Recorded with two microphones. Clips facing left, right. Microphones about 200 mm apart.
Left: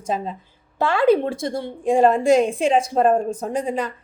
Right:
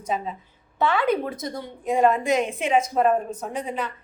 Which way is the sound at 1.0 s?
30° left (ahead or behind).